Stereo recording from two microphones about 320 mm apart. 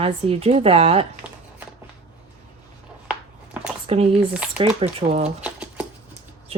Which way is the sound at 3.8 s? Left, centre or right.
Centre.